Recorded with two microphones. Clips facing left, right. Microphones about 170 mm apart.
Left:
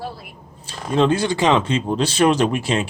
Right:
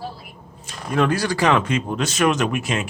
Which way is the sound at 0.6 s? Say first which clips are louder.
Left 3 dB; 25° left (ahead or behind).